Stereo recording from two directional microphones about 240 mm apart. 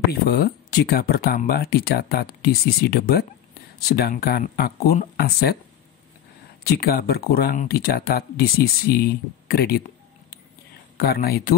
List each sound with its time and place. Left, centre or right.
0.1 s speech: left
6.6 s speech: left